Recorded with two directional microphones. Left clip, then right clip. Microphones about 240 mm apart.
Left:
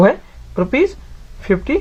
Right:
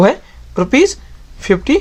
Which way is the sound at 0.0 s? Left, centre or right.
Right.